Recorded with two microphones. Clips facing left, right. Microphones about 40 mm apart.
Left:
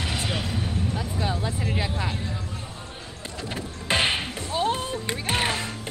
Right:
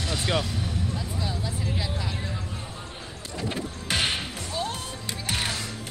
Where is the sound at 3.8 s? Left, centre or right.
Left.